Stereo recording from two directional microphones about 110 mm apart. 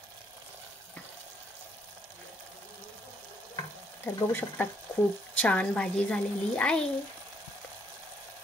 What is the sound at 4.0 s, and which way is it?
Stir, 20° left (ahead or behind).